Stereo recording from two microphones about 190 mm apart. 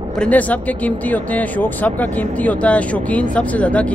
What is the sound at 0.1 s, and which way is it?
Speech, 5° left (ahead or behind).